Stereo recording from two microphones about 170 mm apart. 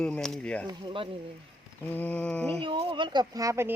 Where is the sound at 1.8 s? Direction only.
10° left (ahead or behind).